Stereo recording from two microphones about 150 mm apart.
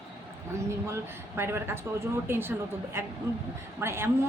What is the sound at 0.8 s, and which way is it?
Speech, 15° right (ahead or behind).